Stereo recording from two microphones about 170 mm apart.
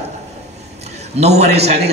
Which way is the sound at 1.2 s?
40° right (ahead or behind).